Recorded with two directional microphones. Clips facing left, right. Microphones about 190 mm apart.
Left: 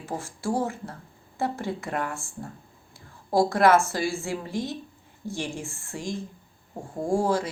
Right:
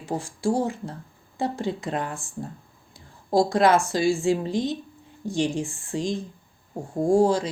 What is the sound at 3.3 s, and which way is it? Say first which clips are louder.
Speech: right 1 dB; 15° right (ahead or behind).